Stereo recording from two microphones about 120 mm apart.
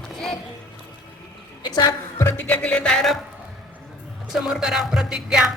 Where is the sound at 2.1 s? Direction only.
20° left (ahead or behind).